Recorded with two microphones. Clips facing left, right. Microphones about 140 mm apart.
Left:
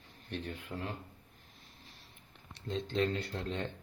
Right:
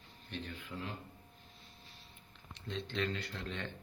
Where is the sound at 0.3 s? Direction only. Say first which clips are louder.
Left 4 dB; 55° left (ahead or behind).